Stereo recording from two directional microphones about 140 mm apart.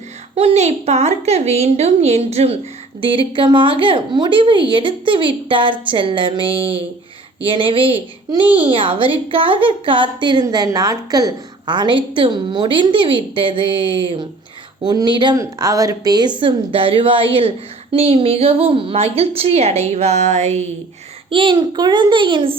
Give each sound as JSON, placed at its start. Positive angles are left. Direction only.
{"t": 0.3, "sound": "a woman's voice", "side_deg": -45}
{"t": 8.4, "sound": "a woman's voice", "side_deg": -10}
{"t": 8.7, "sound": "a woman's voice", "side_deg": -40}
{"t": 21.2, "sound": "a woman's voice", "side_deg": -40}